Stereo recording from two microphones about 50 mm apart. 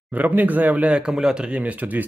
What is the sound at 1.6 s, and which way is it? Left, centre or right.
Speech, right.